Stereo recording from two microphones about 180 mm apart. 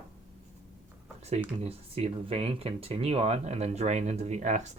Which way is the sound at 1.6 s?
35° right (ahead or behind).